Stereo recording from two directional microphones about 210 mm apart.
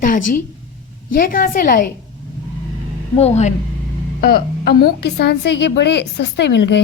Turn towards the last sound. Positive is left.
turn(degrees=55)  # may be behind; listen again after turning